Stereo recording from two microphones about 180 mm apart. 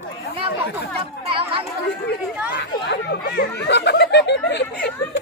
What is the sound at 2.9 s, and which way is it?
Speech, 70° left (ahead or behind).